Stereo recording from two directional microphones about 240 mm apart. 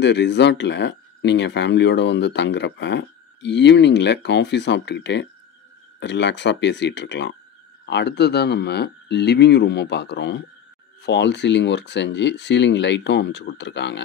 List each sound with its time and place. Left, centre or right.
0.0 s speech: left